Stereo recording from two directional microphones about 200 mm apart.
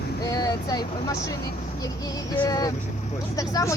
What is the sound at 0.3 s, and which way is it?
Vehicle, 20° left (ahead or behind).